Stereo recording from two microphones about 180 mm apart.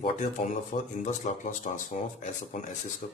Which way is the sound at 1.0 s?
40° left (ahead or behind).